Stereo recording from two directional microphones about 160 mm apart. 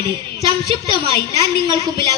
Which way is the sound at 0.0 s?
30° right (ahead or behind).